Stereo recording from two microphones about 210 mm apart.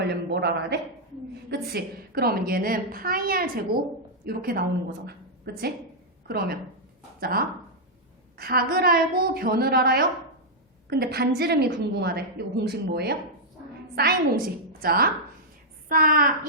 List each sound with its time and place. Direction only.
0.0 s a woman's voice: 55° right (ahead or behind)